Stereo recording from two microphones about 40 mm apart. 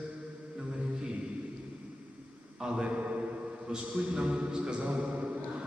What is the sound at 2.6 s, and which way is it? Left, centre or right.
Speech, centre.